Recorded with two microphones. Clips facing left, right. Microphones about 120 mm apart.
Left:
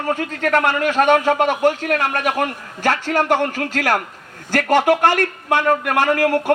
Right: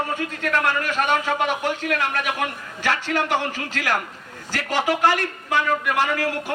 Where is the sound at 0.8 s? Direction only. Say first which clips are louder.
Left 7 dB; 45° left (ahead or behind).